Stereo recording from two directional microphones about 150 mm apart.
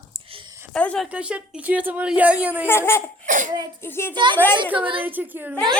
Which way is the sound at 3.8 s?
15° left (ahead or behind).